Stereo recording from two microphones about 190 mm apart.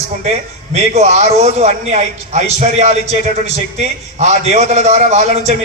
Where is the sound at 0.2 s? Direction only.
35° right (ahead or behind).